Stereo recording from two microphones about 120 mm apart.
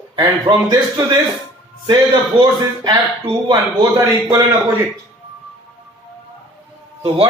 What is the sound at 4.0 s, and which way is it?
Speech, 20° right (ahead or behind).